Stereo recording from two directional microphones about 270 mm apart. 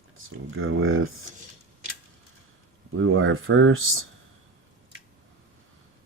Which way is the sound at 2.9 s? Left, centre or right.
Right.